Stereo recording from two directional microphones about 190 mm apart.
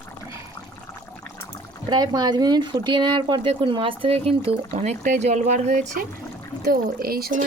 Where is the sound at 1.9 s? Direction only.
20° right (ahead or behind); by 6.1 s 40° right (ahead or behind).